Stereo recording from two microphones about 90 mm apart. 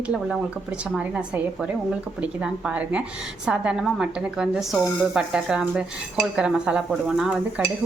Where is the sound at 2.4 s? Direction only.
10° right (ahead or behind).